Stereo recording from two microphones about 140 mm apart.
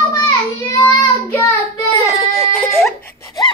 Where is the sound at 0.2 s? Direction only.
20° left (ahead or behind).